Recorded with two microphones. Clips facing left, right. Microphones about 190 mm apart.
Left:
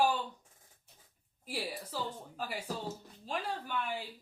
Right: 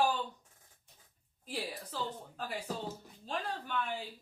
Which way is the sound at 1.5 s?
10° left (ahead or behind).